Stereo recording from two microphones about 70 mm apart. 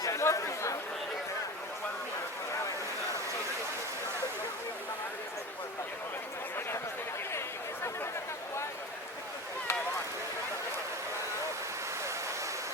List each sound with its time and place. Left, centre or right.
0.0 s chatter: left